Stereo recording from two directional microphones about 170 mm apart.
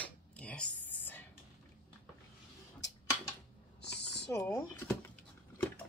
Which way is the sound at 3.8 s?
80° left.